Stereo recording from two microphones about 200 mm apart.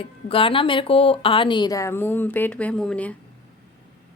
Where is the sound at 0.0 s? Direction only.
25° left (ahead or behind); by 3.2 s 5° left (ahead or behind).